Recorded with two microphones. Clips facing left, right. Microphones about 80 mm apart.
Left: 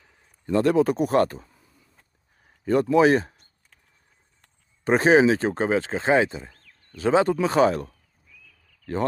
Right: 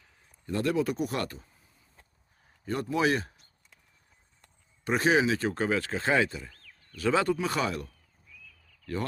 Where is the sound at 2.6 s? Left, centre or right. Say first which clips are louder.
Left 10 dB; left.